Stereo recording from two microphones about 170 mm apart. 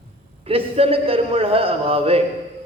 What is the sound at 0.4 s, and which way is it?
A man's voice, 35° right (ahead or behind).